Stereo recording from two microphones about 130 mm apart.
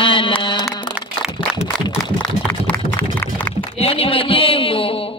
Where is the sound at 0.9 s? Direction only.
5° right (ahead or behind).